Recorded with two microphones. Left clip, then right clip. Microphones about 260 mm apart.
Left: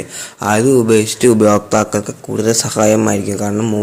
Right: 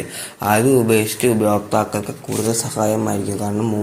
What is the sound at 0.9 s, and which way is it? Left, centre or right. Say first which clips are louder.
Speech: left 5 dB; left.